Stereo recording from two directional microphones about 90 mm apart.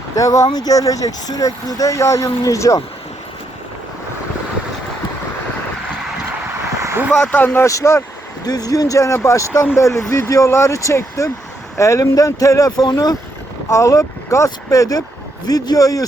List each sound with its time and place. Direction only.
0.2 s speech: 40° left (ahead or behind)
7.2 s speech: 15° left (ahead or behind)
7.6 s speech: 35° left (ahead or behind)
13.7 s a man's voice: 35° left (ahead or behind)